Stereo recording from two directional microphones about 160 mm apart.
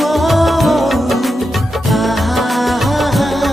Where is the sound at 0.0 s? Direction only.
Centre (ahead or behind).